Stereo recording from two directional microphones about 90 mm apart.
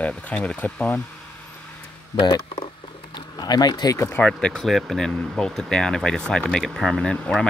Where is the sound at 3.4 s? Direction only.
50° left (ahead or behind).